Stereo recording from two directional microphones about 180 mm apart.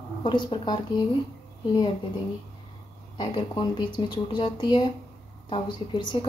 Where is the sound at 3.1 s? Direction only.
25° left (ahead or behind).